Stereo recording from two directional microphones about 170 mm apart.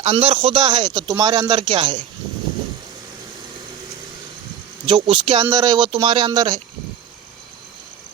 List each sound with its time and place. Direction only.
0.0 s speech: 35° right (ahead or behind)
4.9 s speech: 30° right (ahead or behind)